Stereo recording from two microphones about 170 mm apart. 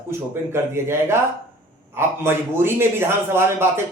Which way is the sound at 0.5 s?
15° right (ahead or behind).